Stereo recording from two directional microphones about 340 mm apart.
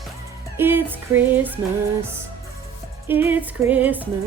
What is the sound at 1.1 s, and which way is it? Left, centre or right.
Speech, centre.